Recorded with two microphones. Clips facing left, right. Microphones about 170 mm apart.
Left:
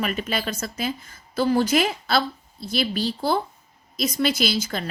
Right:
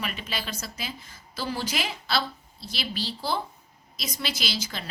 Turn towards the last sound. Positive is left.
turn(degrees=50)  # may be behind; listen again after turning